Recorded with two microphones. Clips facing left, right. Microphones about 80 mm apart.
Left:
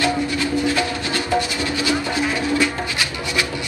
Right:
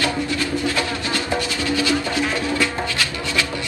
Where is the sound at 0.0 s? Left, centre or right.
Left.